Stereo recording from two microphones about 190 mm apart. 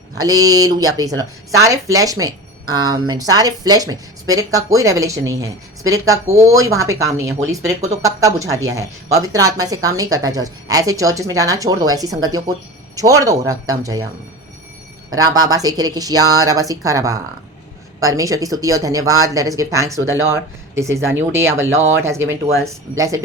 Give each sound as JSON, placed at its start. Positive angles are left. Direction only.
{"t": 0.2, "sound": "speech", "side_deg": -20}
{"t": 15.1, "sound": "speech", "side_deg": -20}
{"t": 22.2, "sound": "speech", "side_deg": -90}
{"t": 23.0, "sound": "speech", "side_deg": -15}